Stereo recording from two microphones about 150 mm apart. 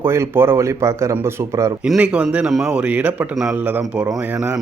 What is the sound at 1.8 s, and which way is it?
Speech, 10° right (ahead or behind).